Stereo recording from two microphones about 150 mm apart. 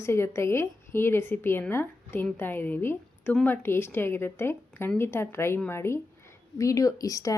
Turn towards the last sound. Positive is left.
turn(degrees=20)  # may be behind; listen again after turning